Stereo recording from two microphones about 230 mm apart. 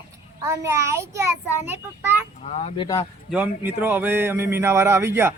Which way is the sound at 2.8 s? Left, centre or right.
Centre.